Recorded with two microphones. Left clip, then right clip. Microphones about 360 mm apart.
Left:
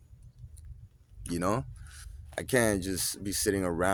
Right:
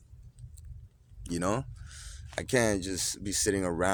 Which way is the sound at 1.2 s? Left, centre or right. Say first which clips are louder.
Left 1 dB; left.